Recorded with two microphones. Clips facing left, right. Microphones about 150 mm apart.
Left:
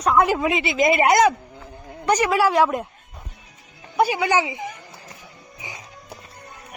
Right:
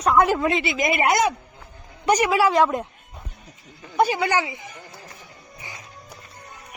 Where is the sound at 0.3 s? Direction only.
15° left (ahead or behind).